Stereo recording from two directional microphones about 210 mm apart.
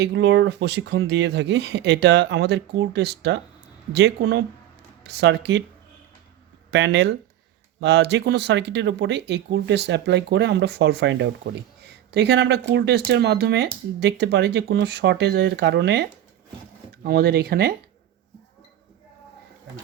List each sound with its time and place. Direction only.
0.0 s speech: 55° right (ahead or behind)
6.7 s speech: 55° right (ahead or behind)
11.9 s a sound: 55° right (ahead or behind)
12.7 s speech: 55° right (ahead or behind)